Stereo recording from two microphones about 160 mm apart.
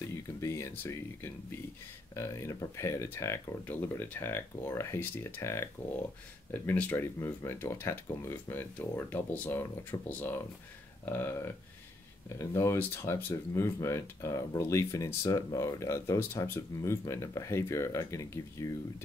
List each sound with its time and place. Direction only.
0.1 s speech: 20° left (ahead or behind)
12.4 s speech: 15° left (ahead or behind)